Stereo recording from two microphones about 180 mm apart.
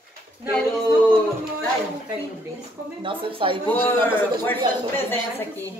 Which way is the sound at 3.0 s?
30° right (ahead or behind).